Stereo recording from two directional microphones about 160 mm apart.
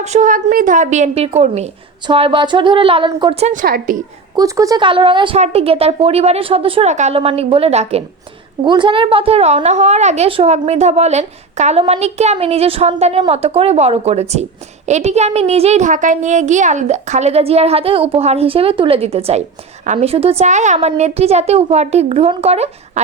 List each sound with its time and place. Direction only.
0.0 s a woman's voice: 50° right (ahead or behind)
2.0 s a woman's voice: 30° right (ahead or behind)
3.4 s a woman's voice: 55° right (ahead or behind)
4.4 s a woman's voice: 20° right (ahead or behind); by 8.0 s 40° right (ahead or behind)
8.6 s a woman's voice: 30° right (ahead or behind)